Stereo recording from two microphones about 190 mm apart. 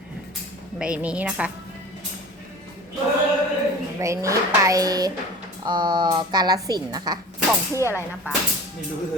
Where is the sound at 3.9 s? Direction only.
15° right (ahead or behind).